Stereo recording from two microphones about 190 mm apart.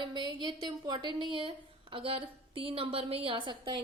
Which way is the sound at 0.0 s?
25° right (ahead or behind).